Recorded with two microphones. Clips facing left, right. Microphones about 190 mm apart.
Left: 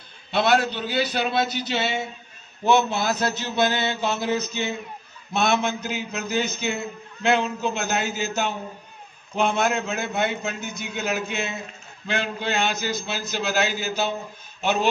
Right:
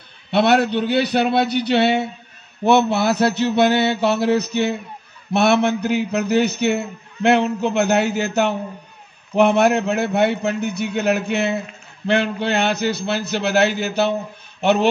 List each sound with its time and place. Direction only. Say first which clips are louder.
0.3 s a man's voice: right 5 dB; 65° right (ahead or behind)